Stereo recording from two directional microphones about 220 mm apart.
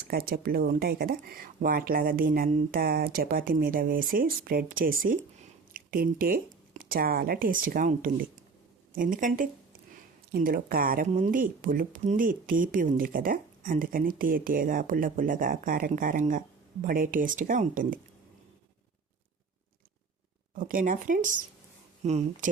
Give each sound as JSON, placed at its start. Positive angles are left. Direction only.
{"t": 0.1, "sound": "speech", "side_deg": -40}
{"t": 20.6, "sound": "speech", "side_deg": -40}